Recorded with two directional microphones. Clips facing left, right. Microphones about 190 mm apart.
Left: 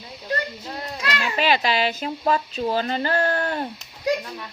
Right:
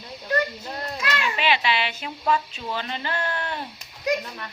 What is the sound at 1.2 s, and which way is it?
Speech, 40° left (ahead or behind).